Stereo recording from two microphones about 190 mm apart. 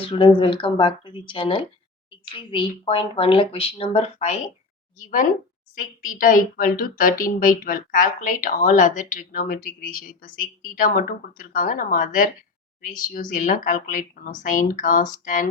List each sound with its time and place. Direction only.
0.0 s speech: 25° left (ahead or behind)
4.9 s a woman's voice: 45° left (ahead or behind)